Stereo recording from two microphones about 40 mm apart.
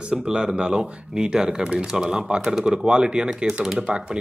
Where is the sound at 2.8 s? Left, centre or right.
Right.